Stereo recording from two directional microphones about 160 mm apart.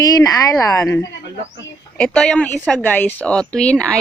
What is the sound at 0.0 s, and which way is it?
Speech, 20° left (ahead or behind).